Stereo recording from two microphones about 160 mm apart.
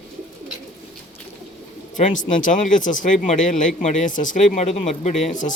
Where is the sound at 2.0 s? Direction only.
50° left (ahead or behind).